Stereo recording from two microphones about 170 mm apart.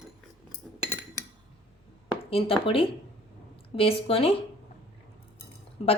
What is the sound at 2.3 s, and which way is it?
Speech, 35° left (ahead or behind).